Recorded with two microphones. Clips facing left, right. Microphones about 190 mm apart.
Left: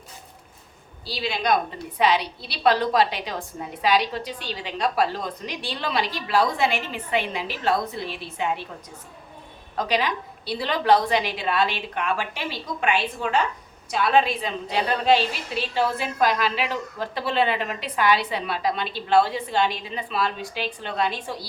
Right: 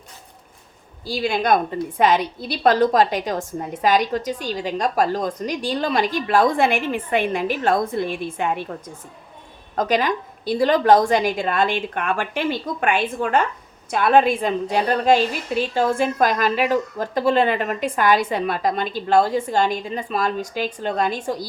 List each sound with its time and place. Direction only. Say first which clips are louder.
1.0 s a woman's voice: right 5 dB; 50° right (ahead or behind)
9.7 s a woman's voice: right 4 dB; 45° right (ahead or behind)